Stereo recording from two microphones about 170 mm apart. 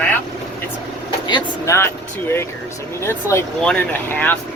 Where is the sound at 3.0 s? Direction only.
15° left (ahead or behind).